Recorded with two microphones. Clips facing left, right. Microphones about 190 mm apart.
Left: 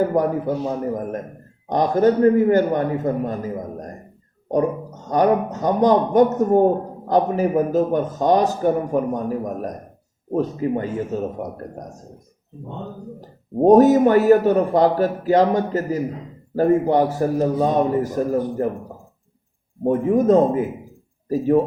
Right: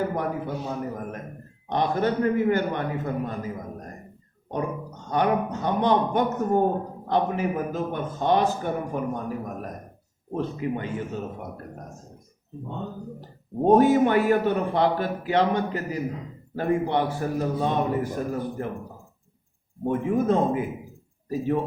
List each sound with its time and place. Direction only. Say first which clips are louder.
0.0 s a man's voice: left 8 dB; 40° left (ahead or behind)
5.0 s a man's voice: left 6 dB; 40° left (ahead or behind)
13.7 s a man's voice: left 6 dB; 40° left (ahead or behind)
19.8 s a man's voice: left 6 dB; 40° left (ahead or behind)